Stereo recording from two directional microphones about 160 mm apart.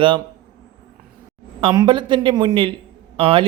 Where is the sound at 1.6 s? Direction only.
30° right (ahead or behind).